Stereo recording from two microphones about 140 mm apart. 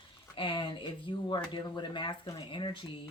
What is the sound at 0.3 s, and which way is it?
Speech, 35° left (ahead or behind).